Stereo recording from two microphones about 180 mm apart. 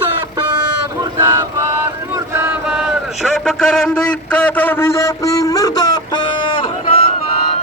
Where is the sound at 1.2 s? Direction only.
25° right (ahead or behind).